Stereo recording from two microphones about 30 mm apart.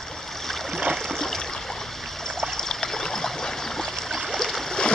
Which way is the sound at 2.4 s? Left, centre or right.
Centre.